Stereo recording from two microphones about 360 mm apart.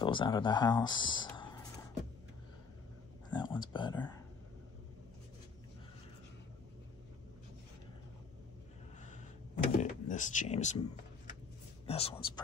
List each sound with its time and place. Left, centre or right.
0.0 s speech: centre
3.3 s speech: centre
9.8 s a sound: left
11.8 s speech: centre